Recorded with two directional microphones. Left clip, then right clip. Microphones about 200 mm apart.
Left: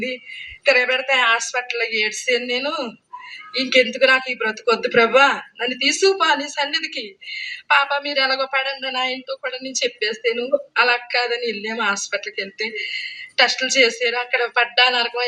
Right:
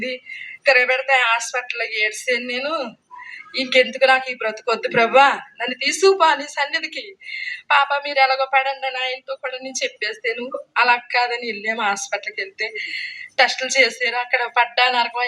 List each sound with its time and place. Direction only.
0.6 s speech: 15° left (ahead or behind)